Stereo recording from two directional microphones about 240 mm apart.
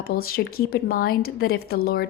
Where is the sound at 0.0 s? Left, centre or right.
Left.